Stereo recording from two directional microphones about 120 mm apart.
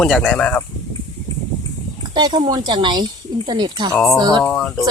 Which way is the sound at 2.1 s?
35° right (ahead or behind).